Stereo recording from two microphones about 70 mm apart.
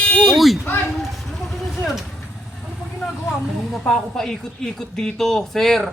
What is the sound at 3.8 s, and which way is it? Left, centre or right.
Speech, centre.